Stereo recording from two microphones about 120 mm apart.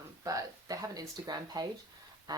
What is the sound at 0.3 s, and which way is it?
Speech, 30° right (ahead or behind).